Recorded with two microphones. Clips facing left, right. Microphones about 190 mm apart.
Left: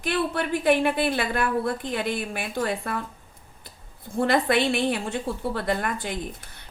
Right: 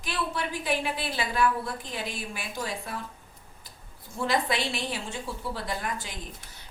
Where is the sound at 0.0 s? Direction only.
60° left (ahead or behind).